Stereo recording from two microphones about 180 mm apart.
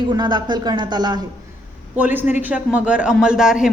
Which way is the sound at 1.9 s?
10° right (ahead or behind).